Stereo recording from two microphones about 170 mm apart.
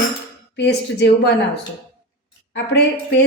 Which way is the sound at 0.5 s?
90° left.